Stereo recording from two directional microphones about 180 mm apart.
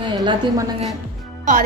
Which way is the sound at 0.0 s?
25° right (ahead or behind).